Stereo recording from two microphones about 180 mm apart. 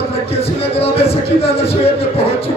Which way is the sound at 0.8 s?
35° left (ahead or behind).